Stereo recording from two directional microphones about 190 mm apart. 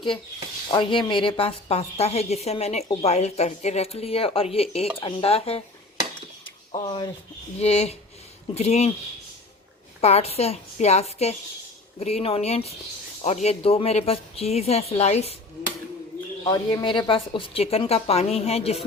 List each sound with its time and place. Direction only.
0.7 s speech: 25° left (ahead or behind)
6.7 s speech: 25° left (ahead or behind)
10.0 s speech: 35° left (ahead or behind)
16.4 s speech: 20° left (ahead or behind)